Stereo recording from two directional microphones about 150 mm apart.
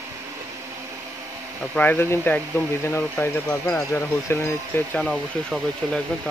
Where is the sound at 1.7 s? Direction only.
15° left (ahead or behind).